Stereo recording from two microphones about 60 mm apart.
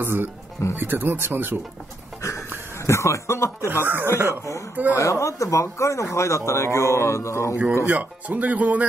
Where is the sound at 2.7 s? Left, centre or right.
Left.